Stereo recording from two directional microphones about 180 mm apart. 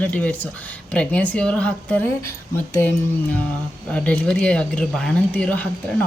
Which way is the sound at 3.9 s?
5° left (ahead or behind).